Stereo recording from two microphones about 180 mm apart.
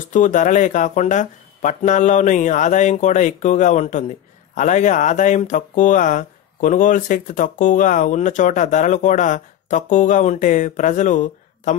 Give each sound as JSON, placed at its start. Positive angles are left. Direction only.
{"t": 0.1, "sound": "speech", "side_deg": 45}